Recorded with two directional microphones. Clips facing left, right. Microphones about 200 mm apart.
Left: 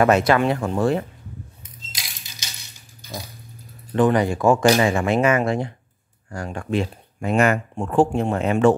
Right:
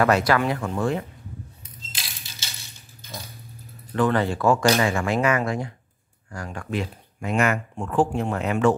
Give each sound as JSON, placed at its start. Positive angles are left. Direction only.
{"t": 0.0, "sound": "speech", "side_deg": 20}
{"t": 3.9, "sound": "speech", "side_deg": 15}